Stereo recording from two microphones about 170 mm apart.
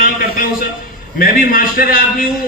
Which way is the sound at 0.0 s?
55° left (ahead or behind).